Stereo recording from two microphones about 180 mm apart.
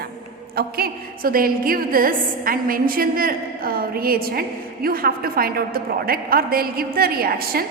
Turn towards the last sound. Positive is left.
turn(degrees=-55)  # may be behind; listen again after turning